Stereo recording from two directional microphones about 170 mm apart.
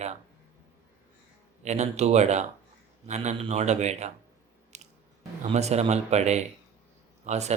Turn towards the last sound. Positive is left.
turn(degrees=-40)  # may be behind; listen again after turning